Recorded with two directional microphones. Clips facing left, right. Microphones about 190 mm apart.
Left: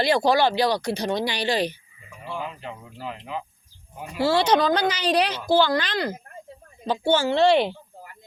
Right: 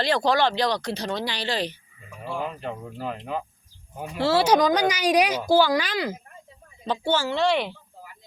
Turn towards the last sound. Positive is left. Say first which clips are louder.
# left 5 dB
turn(degrees=30)  # may be behind; listen again after turning